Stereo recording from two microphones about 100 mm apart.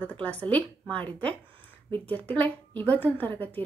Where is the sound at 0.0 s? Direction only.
15° left (ahead or behind).